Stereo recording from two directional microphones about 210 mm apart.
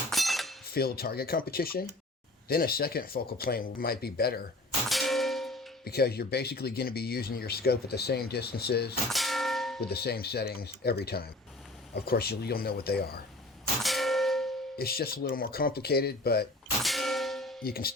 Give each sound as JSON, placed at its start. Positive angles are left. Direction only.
{"t": 0.1, "sound": "cutlery", "side_deg": 0}
{"t": 0.7, "sound": "speech", "side_deg": 45}
{"t": 4.9, "sound": "clang", "side_deg": 0}
{"t": 5.8, "sound": "speech", "side_deg": 50}
{"t": 9.0, "sound": "clang", "side_deg": 0}
{"t": 9.8, "sound": "speech", "side_deg": 50}
{"t": 13.8, "sound": "clang", "side_deg": 0}
{"t": 14.8, "sound": "speech", "side_deg": 45}
{"t": 16.8, "sound": "clang", "side_deg": 0}
{"t": 17.6, "sound": "speech", "side_deg": 45}